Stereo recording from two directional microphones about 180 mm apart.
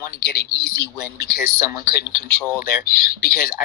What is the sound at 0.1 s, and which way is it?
Speech, 65° left (ahead or behind).